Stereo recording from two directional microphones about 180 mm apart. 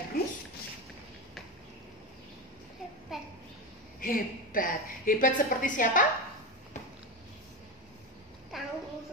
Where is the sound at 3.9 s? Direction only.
50° left (ahead or behind).